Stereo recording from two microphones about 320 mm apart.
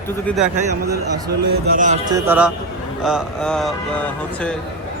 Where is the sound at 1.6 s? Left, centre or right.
Right.